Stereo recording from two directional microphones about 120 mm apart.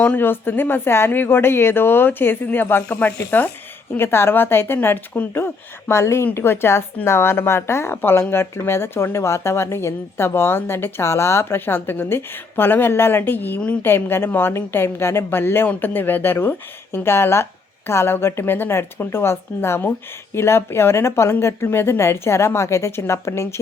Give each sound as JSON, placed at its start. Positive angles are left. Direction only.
{"t": 0.0, "sound": "speech", "side_deg": 15}